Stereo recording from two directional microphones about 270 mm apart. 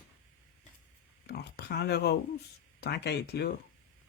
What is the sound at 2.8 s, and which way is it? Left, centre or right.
Speech, left.